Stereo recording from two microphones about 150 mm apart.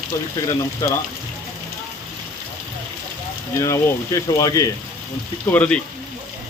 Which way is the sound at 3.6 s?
25° left (ahead or behind).